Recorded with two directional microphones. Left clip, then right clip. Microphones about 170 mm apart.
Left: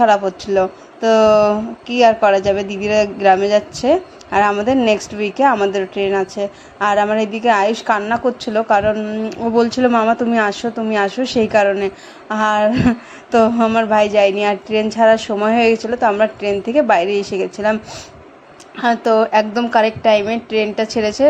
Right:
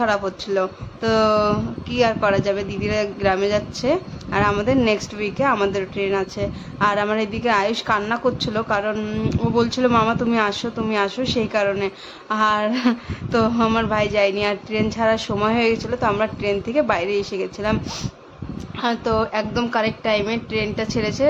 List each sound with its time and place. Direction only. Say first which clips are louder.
0.0 s a woman's voice: left 8 dB; 10° left (ahead or behind)
18.8 s a woman's voice: left 7 dB; 15° left (ahead or behind)